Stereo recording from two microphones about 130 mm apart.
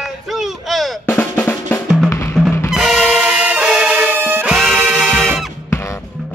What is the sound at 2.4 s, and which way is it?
Music, centre (ahead or behind).